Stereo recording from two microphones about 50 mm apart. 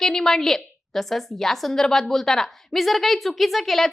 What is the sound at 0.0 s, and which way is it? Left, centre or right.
A woman's voice, centre.